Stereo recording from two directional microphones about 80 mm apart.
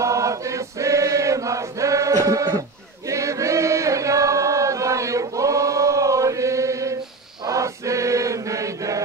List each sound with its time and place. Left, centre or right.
0.0 s chant: right